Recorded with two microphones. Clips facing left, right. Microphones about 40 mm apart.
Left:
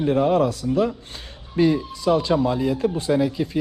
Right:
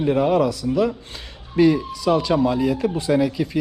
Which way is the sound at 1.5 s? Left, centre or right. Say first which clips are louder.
Right 3 dB; right.